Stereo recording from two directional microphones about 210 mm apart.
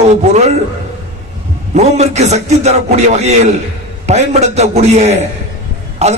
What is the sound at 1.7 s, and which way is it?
Speech, 30° right (ahead or behind).